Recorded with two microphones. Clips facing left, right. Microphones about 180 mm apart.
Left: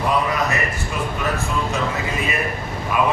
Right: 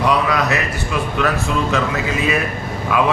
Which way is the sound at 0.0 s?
80° right.